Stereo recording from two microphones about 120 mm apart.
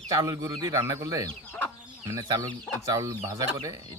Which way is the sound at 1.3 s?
15° left (ahead or behind).